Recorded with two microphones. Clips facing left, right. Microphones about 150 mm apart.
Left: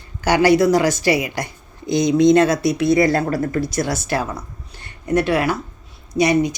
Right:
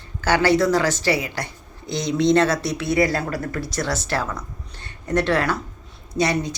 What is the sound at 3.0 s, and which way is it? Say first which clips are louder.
Speech: left 4 dB; 50° left (ahead or behind).